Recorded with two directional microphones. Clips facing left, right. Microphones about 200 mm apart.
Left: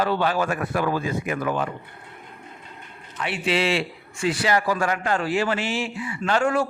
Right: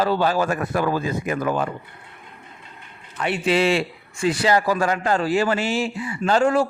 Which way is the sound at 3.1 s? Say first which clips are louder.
Right 4 dB; 45° right (ahead or behind).